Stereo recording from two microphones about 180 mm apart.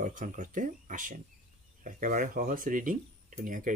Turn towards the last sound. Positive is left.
turn(degrees=-50)  # may be behind; listen again after turning